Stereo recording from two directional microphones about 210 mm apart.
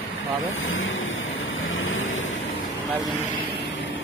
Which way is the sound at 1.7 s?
75° left (ahead or behind).